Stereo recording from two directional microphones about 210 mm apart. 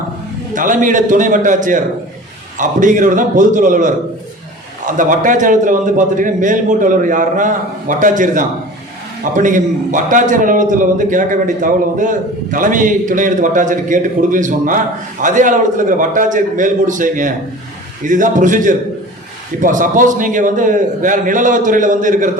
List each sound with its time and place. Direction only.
0.5 s a man's voice: 40° right (ahead or behind)